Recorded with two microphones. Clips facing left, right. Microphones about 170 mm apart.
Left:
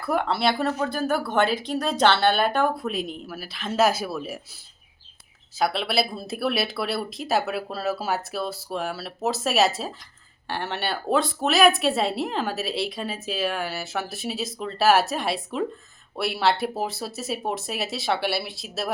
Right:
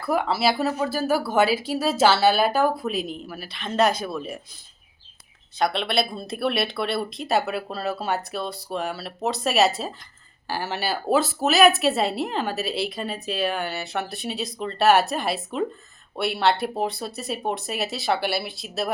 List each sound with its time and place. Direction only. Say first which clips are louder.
0.0 s speech: right 1 dB; centre (ahead or behind)
5.5 s speech: right 1 dB; 5° left (ahead or behind)